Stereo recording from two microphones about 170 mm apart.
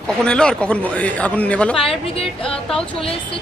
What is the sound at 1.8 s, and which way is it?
Speech, 35° left (ahead or behind).